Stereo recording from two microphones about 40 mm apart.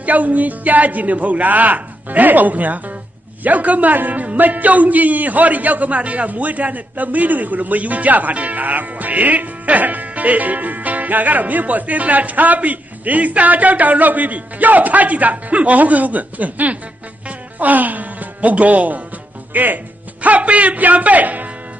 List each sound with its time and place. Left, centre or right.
0.0 s a man's voice: right